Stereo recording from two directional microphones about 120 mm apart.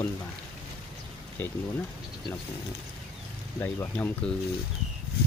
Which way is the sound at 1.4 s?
15° left (ahead or behind).